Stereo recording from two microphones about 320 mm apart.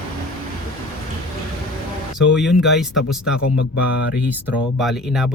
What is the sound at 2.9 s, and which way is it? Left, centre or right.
Speech, left.